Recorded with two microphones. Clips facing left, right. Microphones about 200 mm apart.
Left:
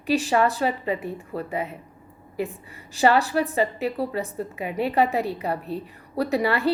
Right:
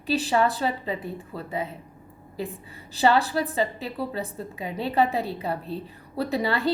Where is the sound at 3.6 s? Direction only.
30° right (ahead or behind).